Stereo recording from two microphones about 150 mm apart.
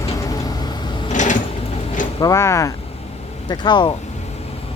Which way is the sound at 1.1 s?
55° left (ahead or behind).